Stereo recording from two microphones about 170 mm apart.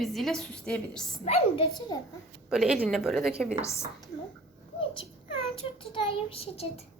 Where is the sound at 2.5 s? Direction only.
5° right (ahead or behind).